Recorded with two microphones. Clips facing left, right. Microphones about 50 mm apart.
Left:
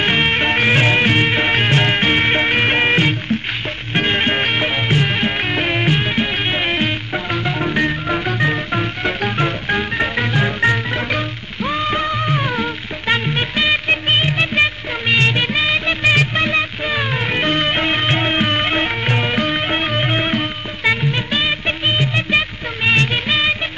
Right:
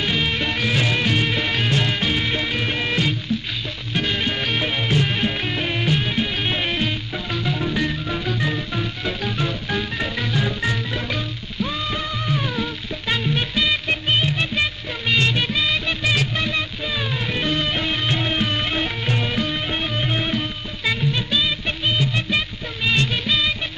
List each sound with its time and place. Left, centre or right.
0.0 s music: left